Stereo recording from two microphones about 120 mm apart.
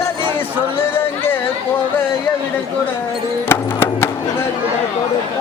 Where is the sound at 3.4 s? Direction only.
20° left (ahead or behind).